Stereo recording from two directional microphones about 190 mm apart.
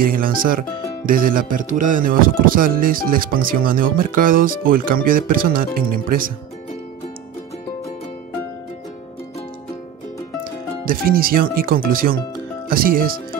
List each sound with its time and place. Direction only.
0.0 s speech: 50° right (ahead or behind)
10.9 s speech: 50° right (ahead or behind)